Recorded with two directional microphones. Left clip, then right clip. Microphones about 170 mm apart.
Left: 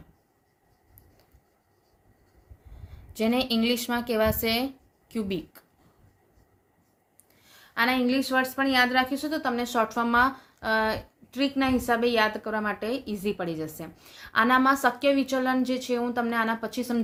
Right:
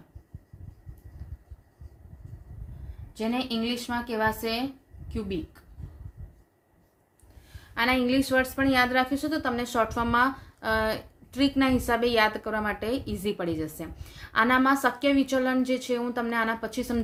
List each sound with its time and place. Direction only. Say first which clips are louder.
3.1 s a woman's voice: left 4 dB; 55° left (ahead or behind)
7.7 s a woman's voice: even; 20° left (ahead or behind)